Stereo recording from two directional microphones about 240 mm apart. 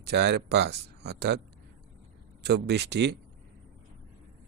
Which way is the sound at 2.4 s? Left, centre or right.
Right.